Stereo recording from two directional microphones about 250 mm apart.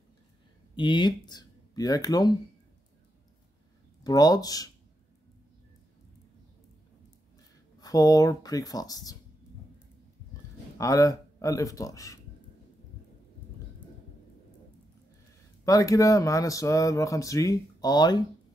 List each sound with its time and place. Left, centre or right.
0.7 s speech: centre
4.0 s speech: centre
7.8 s speech: centre
10.8 s speech: centre
15.6 s speech: centre